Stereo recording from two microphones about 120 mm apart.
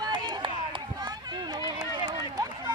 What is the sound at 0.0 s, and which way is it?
Run, 35° right (ahead or behind).